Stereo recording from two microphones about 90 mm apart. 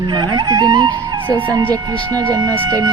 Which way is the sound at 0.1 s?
55° right (ahead or behind).